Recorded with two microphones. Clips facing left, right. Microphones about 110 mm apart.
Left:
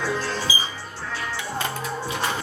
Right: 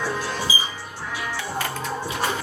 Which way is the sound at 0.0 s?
15° right (ahead or behind).